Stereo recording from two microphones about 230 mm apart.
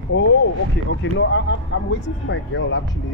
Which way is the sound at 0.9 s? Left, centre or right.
Left.